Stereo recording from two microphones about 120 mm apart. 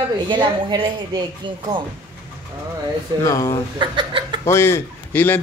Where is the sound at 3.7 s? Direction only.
40° right (ahead or behind).